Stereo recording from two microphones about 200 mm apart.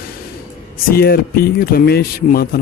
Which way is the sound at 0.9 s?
50° left (ahead or behind).